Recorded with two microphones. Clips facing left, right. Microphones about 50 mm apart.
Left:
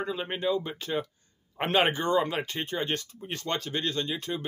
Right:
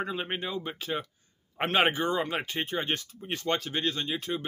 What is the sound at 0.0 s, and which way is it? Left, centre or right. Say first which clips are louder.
Speech: left 2 dB; centre.